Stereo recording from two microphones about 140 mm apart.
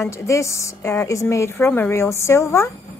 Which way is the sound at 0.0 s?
20° left (ahead or behind).